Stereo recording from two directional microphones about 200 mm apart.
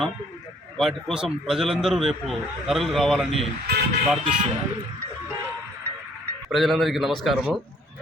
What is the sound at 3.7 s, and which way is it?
Vehicle, 55° right (ahead or behind).